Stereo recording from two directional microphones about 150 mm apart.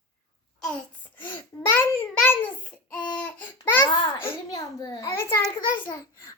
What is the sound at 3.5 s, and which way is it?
A child's voice, 15° left (ahead or behind).